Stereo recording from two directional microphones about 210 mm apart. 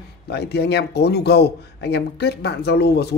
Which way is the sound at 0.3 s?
50° left (ahead or behind).